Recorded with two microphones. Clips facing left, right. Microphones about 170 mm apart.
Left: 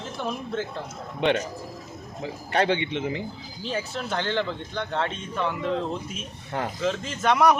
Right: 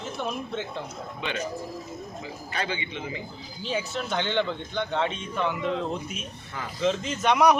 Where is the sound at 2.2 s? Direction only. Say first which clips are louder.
Left 10 dB; 70° left (ahead or behind).